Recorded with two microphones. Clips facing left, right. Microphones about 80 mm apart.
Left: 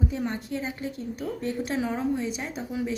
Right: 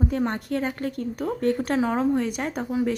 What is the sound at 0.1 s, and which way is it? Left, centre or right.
A woman's voice, right.